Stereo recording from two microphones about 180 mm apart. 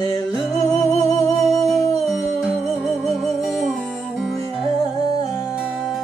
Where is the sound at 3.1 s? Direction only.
5° right (ahead or behind).